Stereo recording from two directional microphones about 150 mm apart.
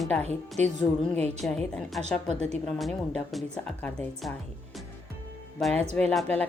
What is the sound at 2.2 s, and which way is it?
Speech, 45° right (ahead or behind).